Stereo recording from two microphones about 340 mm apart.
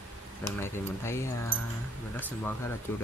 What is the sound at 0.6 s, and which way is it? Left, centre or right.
Speech, centre.